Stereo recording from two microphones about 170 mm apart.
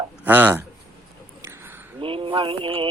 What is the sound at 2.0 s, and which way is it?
Mantra, 30° right (ahead or behind).